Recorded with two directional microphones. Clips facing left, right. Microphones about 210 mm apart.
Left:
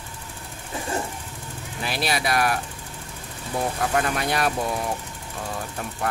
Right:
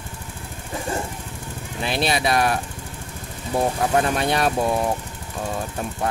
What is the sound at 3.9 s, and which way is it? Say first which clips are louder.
Speech: right 4 dB; 25° right (ahead or behind).